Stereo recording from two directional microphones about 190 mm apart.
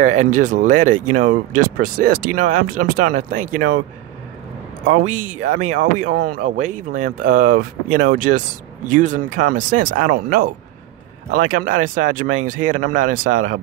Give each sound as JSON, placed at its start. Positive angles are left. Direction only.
{"t": 0.0, "sound": "speech", "side_deg": -40}
{"t": 5.0, "sound": "speech", "side_deg": -40}